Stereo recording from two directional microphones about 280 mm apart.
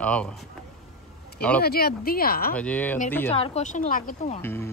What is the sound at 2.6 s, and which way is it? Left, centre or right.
Speech, centre.